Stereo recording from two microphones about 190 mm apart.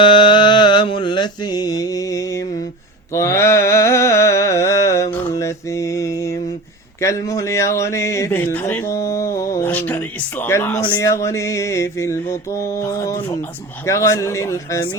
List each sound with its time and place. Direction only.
0.0 s mantra: 25° left (ahead or behind)
3.1 s a sound: 15° left (ahead or behind)
7.0 s a man's voice: 15° left (ahead or behind)